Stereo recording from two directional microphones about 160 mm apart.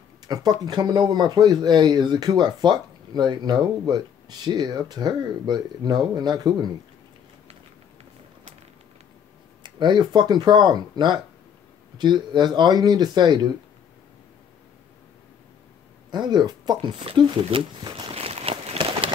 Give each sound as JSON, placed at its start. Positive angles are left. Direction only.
{"t": 0.3, "sound": "speech", "side_deg": -25}
{"t": 9.6, "sound": "speech", "side_deg": -30}
{"t": 16.1, "sound": "speech", "side_deg": -25}